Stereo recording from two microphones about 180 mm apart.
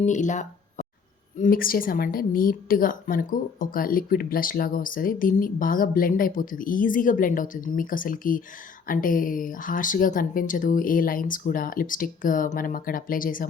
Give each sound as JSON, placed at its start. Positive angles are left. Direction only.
{"t": 0.0, "sound": "a woman's voice", "side_deg": 40}